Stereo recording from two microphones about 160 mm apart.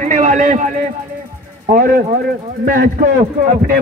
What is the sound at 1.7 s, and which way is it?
Speech, 70° right (ahead or behind).